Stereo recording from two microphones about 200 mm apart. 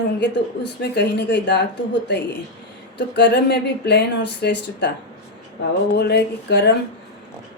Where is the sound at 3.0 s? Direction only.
60° left (ahead or behind).